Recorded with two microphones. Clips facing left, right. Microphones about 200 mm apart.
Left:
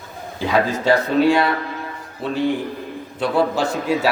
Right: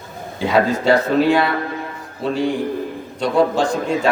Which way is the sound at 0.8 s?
Centre (ahead or behind).